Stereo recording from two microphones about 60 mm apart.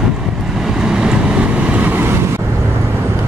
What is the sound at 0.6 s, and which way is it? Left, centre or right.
Vehicle, centre.